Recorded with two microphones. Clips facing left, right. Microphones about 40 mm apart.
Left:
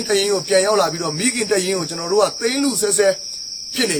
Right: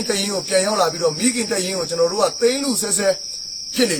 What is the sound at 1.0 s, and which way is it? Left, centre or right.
Speech, left.